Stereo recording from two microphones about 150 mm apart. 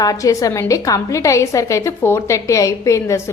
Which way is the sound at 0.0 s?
25° left (ahead or behind).